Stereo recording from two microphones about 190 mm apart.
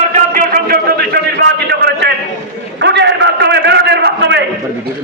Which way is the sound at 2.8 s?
65° right (ahead or behind).